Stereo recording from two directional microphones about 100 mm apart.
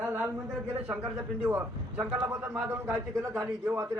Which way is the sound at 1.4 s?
20° right (ahead or behind).